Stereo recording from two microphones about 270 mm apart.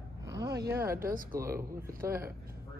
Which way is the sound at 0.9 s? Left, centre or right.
Right.